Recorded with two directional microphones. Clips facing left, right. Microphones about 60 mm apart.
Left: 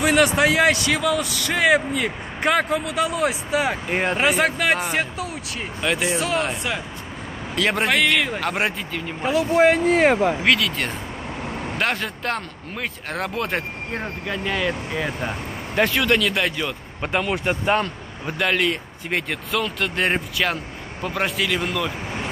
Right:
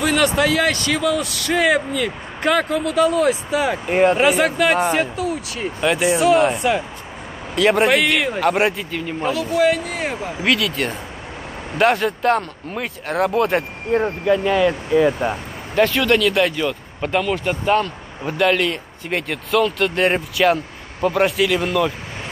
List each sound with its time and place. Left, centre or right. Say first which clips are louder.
0.0 s a man's voice: even; centre
5.8 s speech: right 5 dB; centre
6.5 s speech: right 7 dB; right
7.5 s a man's voice: right 5 dB; centre
9.2 s speech: left 2 dB; centre
9.5 s speech: left 2 dB; left
9.9 s speech: left 8 dB; left
10.4 s a man's voice: right 1 dB; centre
15.7 s a man's voice: right 3 dB; centre
17.0 s speech: right 3 dB; centre
18.2 s a man's voice: right 4 dB; centre